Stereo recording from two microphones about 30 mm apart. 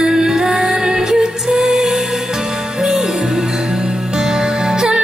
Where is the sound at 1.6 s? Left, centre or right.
Centre.